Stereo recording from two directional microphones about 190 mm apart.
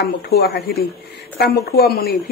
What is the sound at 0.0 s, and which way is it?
Speech, 60° left (ahead or behind).